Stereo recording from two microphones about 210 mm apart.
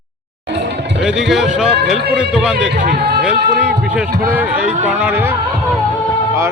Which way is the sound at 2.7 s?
45° right (ahead or behind).